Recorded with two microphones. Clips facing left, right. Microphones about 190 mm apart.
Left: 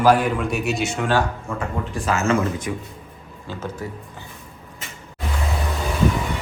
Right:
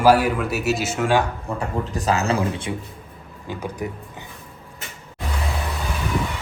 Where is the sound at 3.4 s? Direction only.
15° right (ahead or behind).